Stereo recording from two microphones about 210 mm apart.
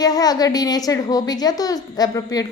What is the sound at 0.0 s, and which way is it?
A woman's voice, 20° left (ahead or behind).